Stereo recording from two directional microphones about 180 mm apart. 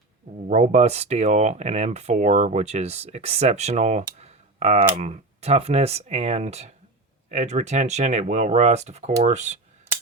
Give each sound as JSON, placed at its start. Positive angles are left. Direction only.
{"t": 0.4, "sound": "speech", "side_deg": -40}
{"t": 4.0, "sound": "computer keyboard", "side_deg": -35}
{"t": 4.9, "sound": "speech", "side_deg": -40}